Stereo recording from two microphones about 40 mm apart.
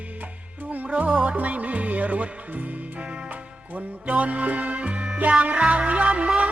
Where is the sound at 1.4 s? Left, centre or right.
Right.